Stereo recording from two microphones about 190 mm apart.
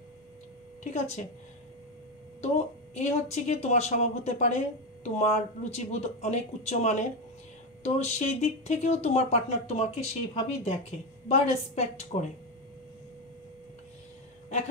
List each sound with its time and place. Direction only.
0.9 s speech: 35° left (ahead or behind)
2.4 s speech: 35° left (ahead or behind)